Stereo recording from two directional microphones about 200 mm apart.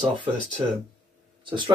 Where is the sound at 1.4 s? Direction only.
25° right (ahead or behind).